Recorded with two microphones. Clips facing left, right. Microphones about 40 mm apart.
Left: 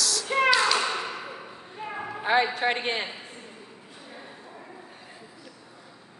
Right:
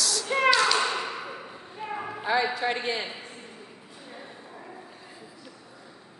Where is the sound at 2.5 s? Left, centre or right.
Left.